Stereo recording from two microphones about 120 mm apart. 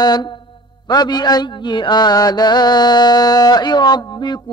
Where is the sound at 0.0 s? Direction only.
35° left (ahead or behind).